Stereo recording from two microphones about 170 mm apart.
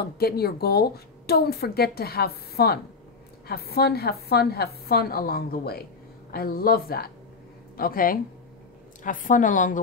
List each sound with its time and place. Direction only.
0.0 s a woman's voice: 65° left (ahead or behind); by 9.8 s 50° left (ahead or behind)